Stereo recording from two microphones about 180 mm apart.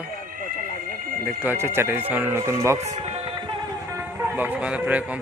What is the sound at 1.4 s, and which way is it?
Speech, 10° right (ahead or behind).